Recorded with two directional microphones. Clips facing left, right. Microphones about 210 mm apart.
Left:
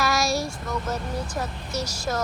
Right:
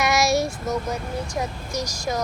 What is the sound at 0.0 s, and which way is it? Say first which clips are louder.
Child singing: right 4 dB; 20° right (ahead or behind).